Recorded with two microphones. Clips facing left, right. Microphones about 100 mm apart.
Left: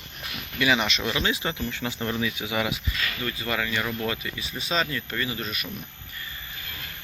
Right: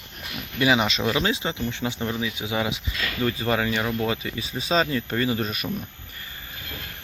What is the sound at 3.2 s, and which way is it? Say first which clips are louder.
Speech: right 7 dB; 35° right (ahead or behind).